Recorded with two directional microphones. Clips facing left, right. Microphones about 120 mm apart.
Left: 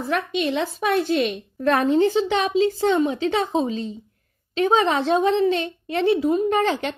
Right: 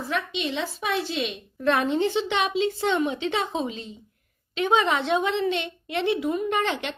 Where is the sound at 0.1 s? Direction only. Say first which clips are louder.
Left 6 dB; 50° left (ahead or behind).